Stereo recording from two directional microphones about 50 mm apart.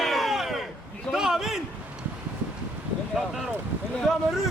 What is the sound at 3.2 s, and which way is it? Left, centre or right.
Speech, centre.